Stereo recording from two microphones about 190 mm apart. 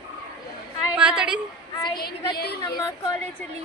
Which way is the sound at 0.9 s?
5° right (ahead or behind).